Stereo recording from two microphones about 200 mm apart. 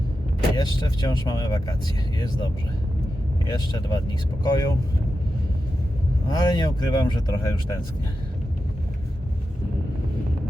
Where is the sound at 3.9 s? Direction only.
20° left (ahead or behind).